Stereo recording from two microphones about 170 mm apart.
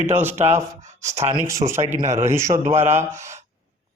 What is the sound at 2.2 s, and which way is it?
Speech, 15° right (ahead or behind).